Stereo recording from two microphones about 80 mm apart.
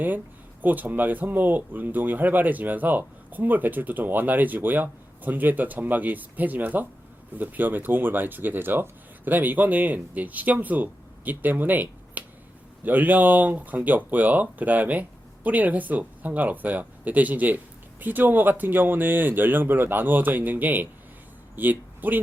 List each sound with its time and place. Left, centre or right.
0.6 s speech: right